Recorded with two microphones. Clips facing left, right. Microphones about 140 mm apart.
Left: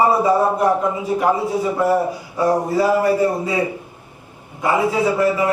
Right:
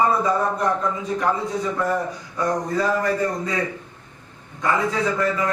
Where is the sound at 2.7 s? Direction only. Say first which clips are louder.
Left 5 dB; 10° left (ahead or behind).